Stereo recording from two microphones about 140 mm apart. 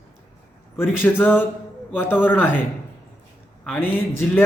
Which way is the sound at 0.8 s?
15° left (ahead or behind).